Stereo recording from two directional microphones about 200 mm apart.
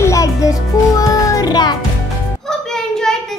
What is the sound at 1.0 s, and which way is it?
Child singing, 15° left (ahead or behind).